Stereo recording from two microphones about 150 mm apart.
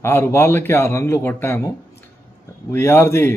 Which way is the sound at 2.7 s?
15° left (ahead or behind).